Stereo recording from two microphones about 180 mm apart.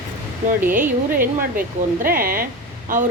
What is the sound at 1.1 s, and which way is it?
Speech, 50° right (ahead or behind).